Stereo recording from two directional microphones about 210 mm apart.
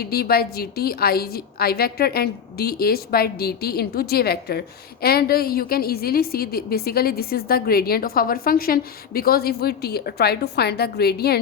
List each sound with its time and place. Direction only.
0.0 s a woman's voice: 45° left (ahead or behind)